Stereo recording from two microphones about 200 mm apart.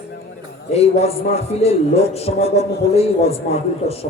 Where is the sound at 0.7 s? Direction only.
30° left (ahead or behind).